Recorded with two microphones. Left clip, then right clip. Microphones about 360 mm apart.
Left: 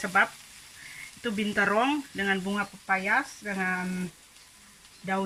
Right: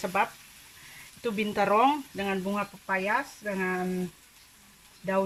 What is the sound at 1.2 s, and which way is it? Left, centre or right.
Speech, centre.